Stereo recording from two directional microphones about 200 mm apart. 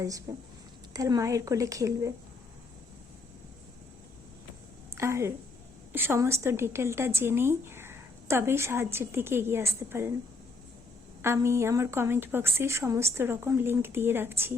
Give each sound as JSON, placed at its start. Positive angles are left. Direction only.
{"t": 0.9, "sound": "speech", "side_deg": -15}
{"t": 4.9, "sound": "a woman's voice", "side_deg": -15}
{"t": 11.2, "sound": "speech", "side_deg": -15}